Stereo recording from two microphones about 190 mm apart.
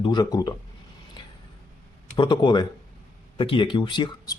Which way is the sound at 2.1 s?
25° left (ahead or behind).